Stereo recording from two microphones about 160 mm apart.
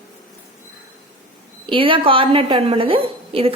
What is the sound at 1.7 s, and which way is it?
A woman's voice, 35° right (ahead or behind).